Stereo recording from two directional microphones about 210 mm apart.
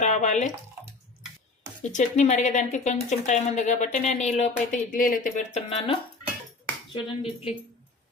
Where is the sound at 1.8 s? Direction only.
35° left (ahead or behind).